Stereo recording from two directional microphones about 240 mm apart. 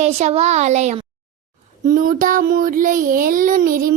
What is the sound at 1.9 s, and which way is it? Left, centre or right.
Child singing, right.